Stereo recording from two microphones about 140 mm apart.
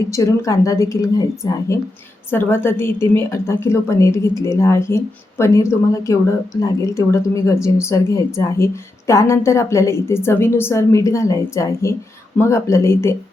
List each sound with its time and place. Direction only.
0.1 s a woman's voice: 20° left (ahead or behind)